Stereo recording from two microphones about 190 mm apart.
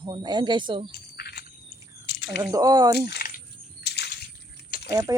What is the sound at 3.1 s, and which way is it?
Coin, 55° left (ahead or behind).